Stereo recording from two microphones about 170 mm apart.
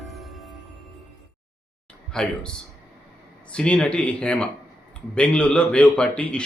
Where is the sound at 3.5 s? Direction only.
5° left (ahead or behind).